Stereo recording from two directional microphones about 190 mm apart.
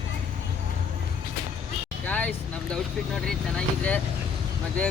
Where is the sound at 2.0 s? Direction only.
5° left (ahead or behind).